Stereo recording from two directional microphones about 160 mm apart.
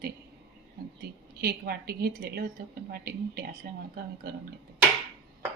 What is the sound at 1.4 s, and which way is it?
A woman's voice, 80° right.